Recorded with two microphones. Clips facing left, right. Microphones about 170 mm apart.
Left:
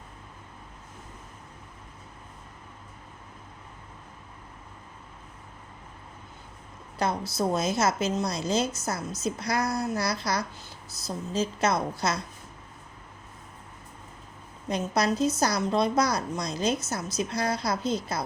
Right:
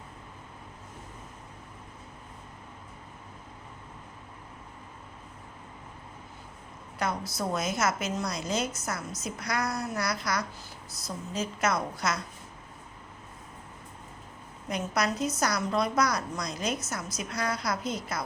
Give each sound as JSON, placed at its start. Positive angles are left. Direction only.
{"t": 7.0, "sound": "a woman's voice", "side_deg": 30}
{"t": 14.7, "sound": "a woman's voice", "side_deg": 30}